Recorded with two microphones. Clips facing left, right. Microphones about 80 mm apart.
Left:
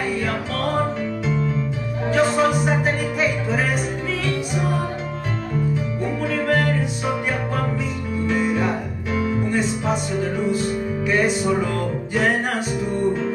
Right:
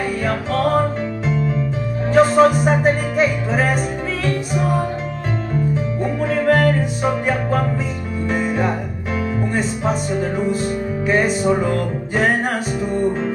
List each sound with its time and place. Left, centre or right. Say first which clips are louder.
2.1 s music: right 6 dB; right
6.2 s music: right 5 dB; right
8.3 s music: right 1 dB; right
11.1 s music: right 3 dB; right